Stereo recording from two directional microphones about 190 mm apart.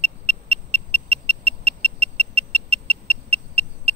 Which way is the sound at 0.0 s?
35° right (ahead or behind).